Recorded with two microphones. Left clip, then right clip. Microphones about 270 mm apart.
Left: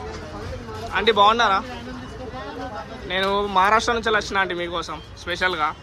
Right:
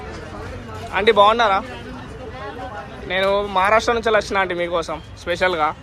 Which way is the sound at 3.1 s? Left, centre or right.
Centre.